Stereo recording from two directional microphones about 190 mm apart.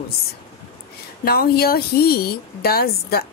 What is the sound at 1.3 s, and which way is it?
A woman's voice, 55° left (ahead or behind).